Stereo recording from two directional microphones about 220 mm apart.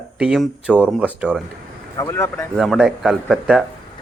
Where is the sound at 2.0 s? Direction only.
10° left (ahead or behind).